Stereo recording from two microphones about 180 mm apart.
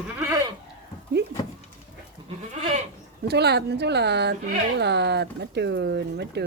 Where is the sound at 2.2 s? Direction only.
25° right (ahead or behind).